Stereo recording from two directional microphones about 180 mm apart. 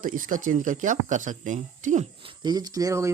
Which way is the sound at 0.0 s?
50° right (ahead or behind).